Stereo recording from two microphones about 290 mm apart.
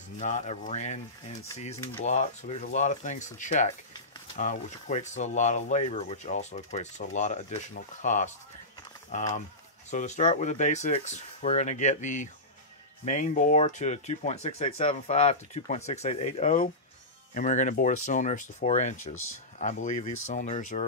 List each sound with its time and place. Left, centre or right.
0.2 s speech: left
2.0 s speech: left
19.9 s speech: left
20.3 s speech: left